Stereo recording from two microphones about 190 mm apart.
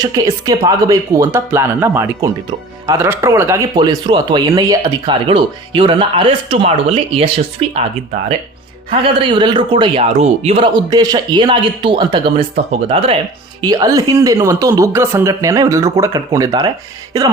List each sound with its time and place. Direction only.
0.0 s speech: 20° right (ahead or behind)
9.2 s speech: 25° right (ahead or behind)
13.6 s speech: 20° right (ahead or behind)